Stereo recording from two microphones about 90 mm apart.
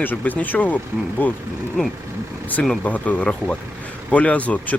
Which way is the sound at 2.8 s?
15° left (ahead or behind).